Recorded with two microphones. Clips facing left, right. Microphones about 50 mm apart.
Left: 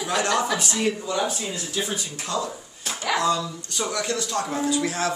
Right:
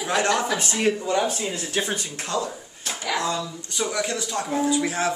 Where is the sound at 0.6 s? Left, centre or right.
Right.